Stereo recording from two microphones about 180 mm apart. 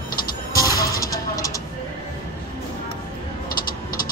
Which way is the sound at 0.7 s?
20° left (ahead or behind).